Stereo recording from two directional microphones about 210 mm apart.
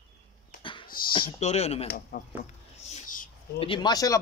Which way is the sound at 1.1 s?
25° left (ahead or behind).